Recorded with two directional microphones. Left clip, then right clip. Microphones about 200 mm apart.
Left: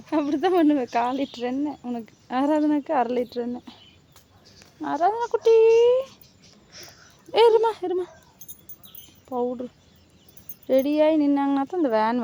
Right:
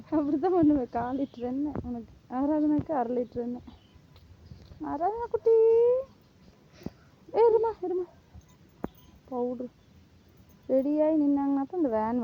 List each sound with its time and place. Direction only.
0.1 s speech: 30° left (ahead or behind)
4.8 s speech: 30° left (ahead or behind)
6.7 s a sound: 5° left (ahead or behind)
7.5 s speech: 35° left (ahead or behind)
9.3 s speech: 35° left (ahead or behind)
10.7 s speech: 25° left (ahead or behind)